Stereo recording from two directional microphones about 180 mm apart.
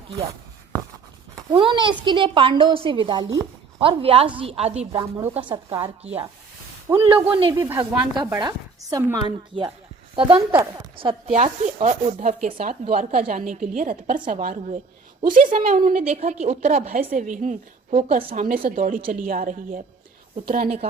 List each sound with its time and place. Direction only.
1.5 s speech: 25° right (ahead or behind)
3.8 s speech: 30° right (ahead or behind)
4.9 s a woman's voice: 15° right (ahead or behind)
5.3 s speech: 30° right (ahead or behind)
6.9 s speech: 20° right (ahead or behind)
7.3 s speech: 30° right (ahead or behind)
7.5 s a woman's voice: 20° right (ahead or behind)
11.4 s a woman's voice: 40° right (ahead or behind)
15.4 s speech: 35° right (ahead or behind)
15.8 s a woman's voice: 45° right (ahead or behind)